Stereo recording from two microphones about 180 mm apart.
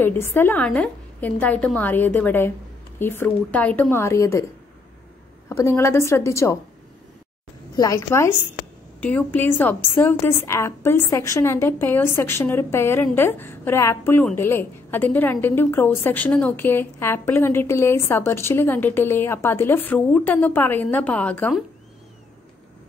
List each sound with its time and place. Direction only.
0.0 s a woman's voice: 15° left (ahead or behind)
5.5 s a woman's voice: 15° left (ahead or behind)
7.7 s a woman's voice: 15° left (ahead or behind)